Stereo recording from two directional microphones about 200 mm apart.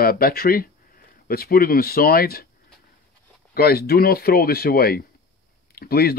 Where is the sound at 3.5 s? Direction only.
50° left (ahead or behind).